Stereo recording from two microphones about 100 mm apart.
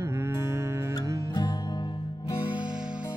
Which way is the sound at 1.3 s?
45° left (ahead or behind).